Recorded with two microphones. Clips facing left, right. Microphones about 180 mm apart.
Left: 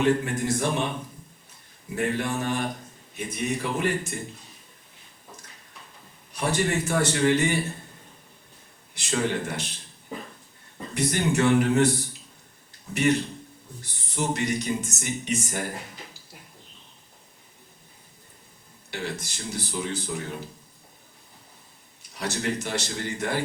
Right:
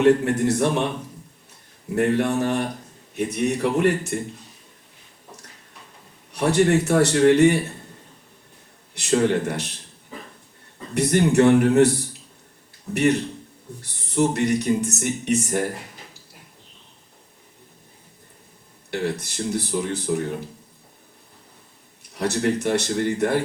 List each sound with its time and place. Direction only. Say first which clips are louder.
0.0 s a man's voice: right 6 dB; 70° right (ahead or behind)
2.0 s a man's voice: right 7 dB; 65° right (ahead or behind)
6.3 s speech: right 7 dB; 65° right (ahead or behind)
9.0 s speech: right 7 dB; 65° right (ahead or behind)
10.9 s speech: right 7 dB; 60° right (ahead or behind)
13.8 s speech: right 8 dB; 65° right (ahead or behind)
18.9 s speech: right 7 dB; 60° right (ahead or behind)
22.1 s speech: right 7 dB; 60° right (ahead or behind)